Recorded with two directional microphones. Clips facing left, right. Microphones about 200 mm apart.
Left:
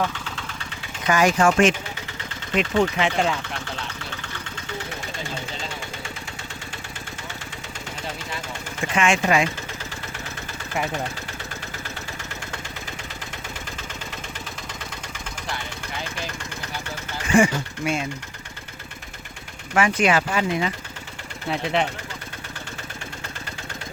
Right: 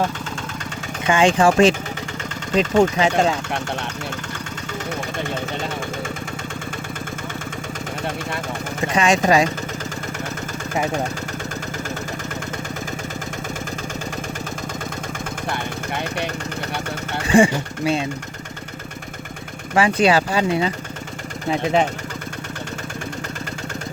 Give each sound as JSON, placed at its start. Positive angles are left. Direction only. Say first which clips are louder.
{"t": 1.0, "sound": "speech", "louder": "right 3 dB", "side_deg": -30}
{"t": 2.5, "sound": "speech", "louder": "right 5 dB", "side_deg": -45}
{"t": 5.1, "sound": "engine", "louder": "right 7 dB", "side_deg": -55}
{"t": 8.9, "sound": "speech", "louder": "right 4 dB", "side_deg": -35}
{"t": 15.4, "sound": "vehicle", "louder": "right 6 dB", "side_deg": -55}
{"t": 17.2, "sound": "speech", "louder": "right 3 dB", "side_deg": -30}
{"t": 19.7, "sound": "speech", "louder": "right 4 dB", "side_deg": -30}